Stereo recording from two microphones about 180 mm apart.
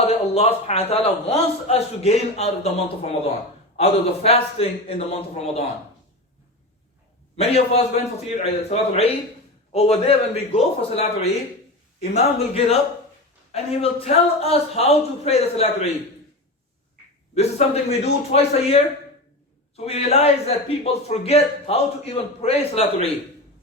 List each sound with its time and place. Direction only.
0.0 s speech: 35° left (ahead or behind)
7.3 s speech: 35° left (ahead or behind)
17.8 s speech: 35° left (ahead or behind)